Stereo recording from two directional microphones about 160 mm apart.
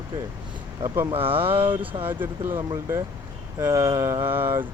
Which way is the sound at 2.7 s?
20° right (ahead or behind).